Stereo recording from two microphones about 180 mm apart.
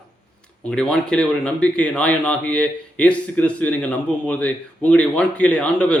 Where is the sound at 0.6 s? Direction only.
5° left (ahead or behind).